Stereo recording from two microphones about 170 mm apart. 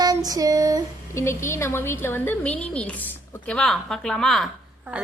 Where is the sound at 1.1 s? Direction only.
15° left (ahead or behind).